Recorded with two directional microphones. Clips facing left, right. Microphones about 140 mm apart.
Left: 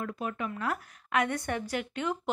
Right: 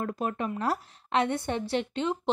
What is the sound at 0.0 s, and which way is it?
A woman's voice, 40° right (ahead or behind).